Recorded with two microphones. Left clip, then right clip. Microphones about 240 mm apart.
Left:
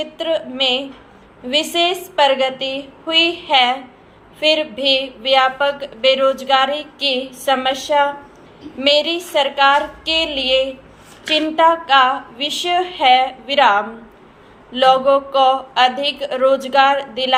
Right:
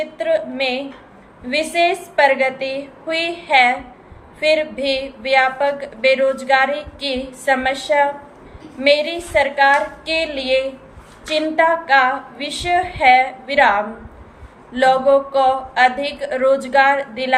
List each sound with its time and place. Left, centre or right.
0.0 s a woman's voice: centre